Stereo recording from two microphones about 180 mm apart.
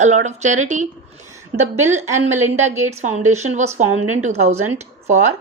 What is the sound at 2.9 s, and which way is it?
A woman's voice, 40° right (ahead or behind).